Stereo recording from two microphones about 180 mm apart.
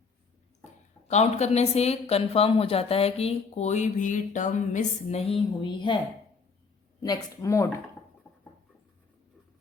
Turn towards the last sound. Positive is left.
turn(degrees=15)  # may be behind; listen again after turning